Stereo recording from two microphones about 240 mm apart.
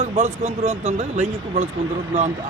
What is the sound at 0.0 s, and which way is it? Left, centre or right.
Speech, right.